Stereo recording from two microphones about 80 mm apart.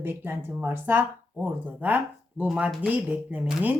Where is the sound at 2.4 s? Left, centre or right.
Centre.